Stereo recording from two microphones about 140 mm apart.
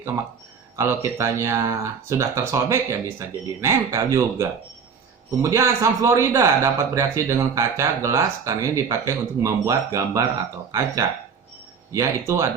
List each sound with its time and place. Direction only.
0.8 s speech: 20° right (ahead or behind)